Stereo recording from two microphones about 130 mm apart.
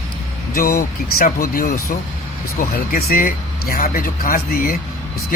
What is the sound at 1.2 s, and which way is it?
Speech, 90° left.